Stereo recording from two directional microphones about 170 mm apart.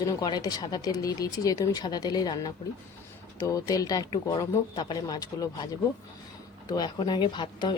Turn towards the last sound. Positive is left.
turn(degrees=25)  # may be behind; listen again after turning